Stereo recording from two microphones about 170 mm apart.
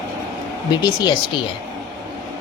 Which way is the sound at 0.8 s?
25° left (ahead or behind).